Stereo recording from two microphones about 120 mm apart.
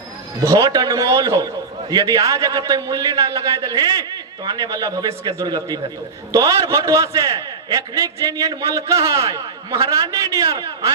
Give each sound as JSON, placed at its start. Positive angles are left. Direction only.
{"t": 0.4, "sound": "a man's voice", "side_deg": -30}